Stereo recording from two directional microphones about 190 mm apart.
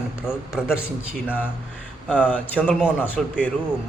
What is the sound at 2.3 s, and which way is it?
Speech, 10° left (ahead or behind).